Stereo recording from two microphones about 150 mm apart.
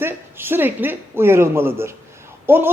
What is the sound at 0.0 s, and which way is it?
Speech, 15° right (ahead or behind).